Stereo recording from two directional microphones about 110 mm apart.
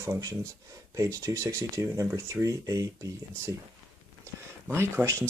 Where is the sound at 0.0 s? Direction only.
30° right (ahead or behind).